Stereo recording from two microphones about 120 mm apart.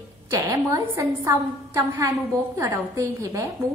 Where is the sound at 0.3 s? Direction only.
25° right (ahead or behind).